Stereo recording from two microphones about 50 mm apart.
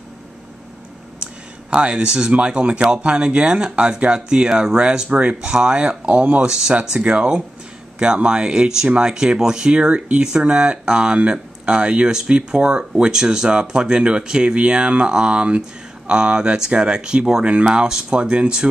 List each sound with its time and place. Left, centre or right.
1.2 s speech: right
6.4 s speech: centre